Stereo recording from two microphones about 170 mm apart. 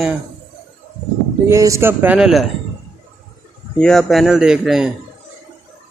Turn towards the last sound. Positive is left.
turn(degrees=-5)  # may be behind; listen again after turning